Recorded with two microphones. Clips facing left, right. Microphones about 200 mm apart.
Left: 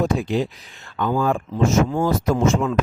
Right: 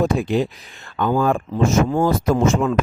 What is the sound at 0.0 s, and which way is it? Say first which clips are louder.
Speech: right 2 dB; 55° right (ahead or behind).